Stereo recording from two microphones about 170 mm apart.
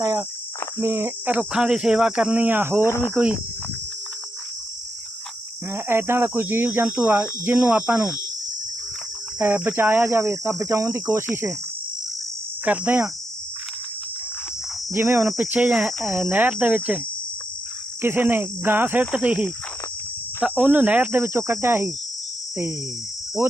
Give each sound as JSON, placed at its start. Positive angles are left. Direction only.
{"t": 0.0, "sound": "cricket", "side_deg": -20}
{"t": 0.8, "sound": "speech", "side_deg": -15}
{"t": 5.7, "sound": "speech", "side_deg": -15}
{"t": 9.6, "sound": "speech", "side_deg": -10}
{"t": 12.6, "sound": "speech", "side_deg": -10}
{"t": 14.9, "sound": "speech", "side_deg": -15}
{"t": 15.4, "sound": "cricket", "side_deg": -10}
{"t": 16.3, "sound": "speech", "side_deg": -10}
{"t": 18.0, "sound": "speech", "side_deg": -10}